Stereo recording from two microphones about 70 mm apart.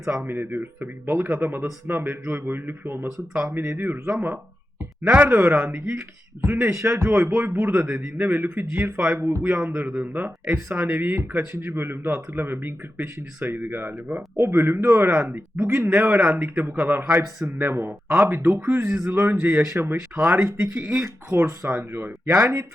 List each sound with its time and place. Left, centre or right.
0.2 s speech: right
7.3 s speech: right